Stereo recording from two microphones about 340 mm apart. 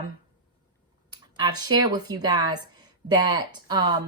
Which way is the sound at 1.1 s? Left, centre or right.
Centre.